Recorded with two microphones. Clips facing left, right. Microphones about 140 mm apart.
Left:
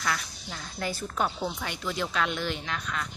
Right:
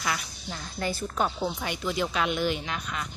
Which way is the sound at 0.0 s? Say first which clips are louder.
Even; 10° right (ahead or behind).